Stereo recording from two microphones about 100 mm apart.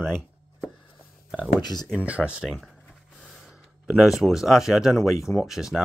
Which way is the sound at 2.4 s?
Centre (ahead or behind).